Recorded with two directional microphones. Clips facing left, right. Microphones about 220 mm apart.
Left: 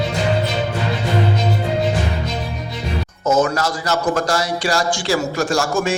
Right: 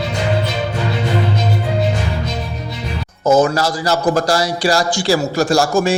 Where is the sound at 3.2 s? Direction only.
35° right (ahead or behind).